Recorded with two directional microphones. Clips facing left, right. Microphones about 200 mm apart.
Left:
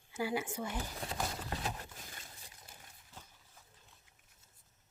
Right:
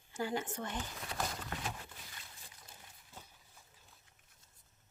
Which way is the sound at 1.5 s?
40° left (ahead or behind).